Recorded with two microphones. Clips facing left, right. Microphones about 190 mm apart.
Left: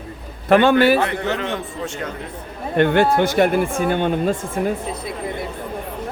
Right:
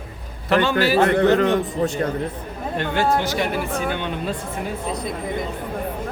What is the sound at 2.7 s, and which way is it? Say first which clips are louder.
Speech: left 6 dB; 60° left (ahead or behind).